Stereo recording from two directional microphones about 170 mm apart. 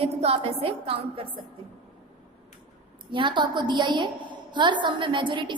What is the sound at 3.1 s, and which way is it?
A woman's voice, 30° right (ahead or behind).